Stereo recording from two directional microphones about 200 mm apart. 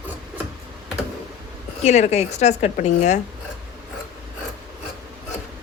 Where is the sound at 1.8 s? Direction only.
35° left (ahead or behind).